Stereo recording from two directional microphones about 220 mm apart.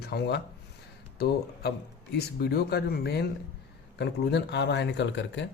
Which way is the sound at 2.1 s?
45° left (ahead or behind).